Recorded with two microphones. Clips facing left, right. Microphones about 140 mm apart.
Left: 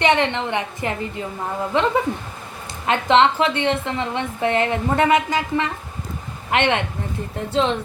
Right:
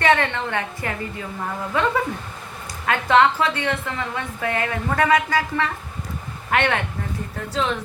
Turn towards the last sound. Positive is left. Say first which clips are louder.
# left 4 dB
turn(degrees=30)  # may be behind; listen again after turning